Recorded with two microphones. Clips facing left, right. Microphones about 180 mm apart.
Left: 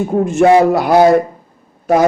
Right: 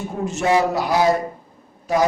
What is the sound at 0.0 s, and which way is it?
Speech, 55° left (ahead or behind).